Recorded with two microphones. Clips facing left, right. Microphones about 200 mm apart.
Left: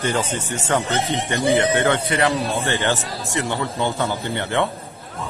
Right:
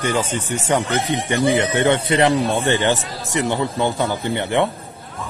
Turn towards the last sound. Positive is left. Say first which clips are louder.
# right 3 dB
turn(degrees=-15)  # may be behind; listen again after turning